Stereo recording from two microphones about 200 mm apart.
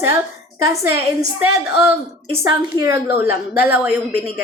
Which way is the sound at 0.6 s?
15° right (ahead or behind).